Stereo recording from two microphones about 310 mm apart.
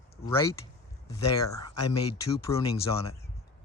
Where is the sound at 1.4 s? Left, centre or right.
Left.